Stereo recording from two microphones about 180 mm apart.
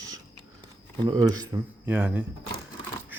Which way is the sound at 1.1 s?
20° right (ahead or behind).